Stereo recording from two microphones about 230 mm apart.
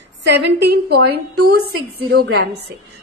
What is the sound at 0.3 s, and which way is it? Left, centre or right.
A woman's voice, right.